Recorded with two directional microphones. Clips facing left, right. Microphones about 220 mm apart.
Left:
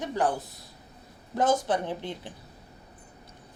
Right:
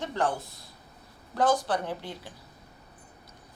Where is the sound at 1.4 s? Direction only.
20° left (ahead or behind).